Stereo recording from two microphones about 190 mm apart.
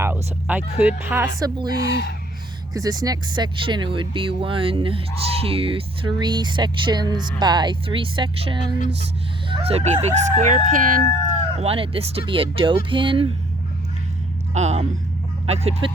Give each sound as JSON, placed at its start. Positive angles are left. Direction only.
{"t": 0.0, "sound": "speech", "side_deg": -10}
{"t": 1.4, "sound": "speech", "side_deg": -20}
{"t": 1.8, "sound": "speech", "side_deg": 60}
{"t": 2.7, "sound": "speech", "side_deg": -20}
{"t": 11.6, "sound": "speech", "side_deg": -30}
{"t": 14.5, "sound": "speech", "side_deg": -35}